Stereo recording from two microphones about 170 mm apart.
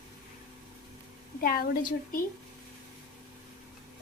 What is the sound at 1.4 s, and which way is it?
Speech, 60° left (ahead or behind).